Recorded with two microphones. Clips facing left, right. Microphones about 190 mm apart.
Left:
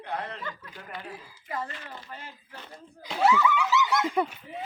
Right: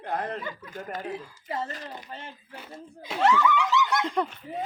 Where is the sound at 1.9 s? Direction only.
20° right (ahead or behind).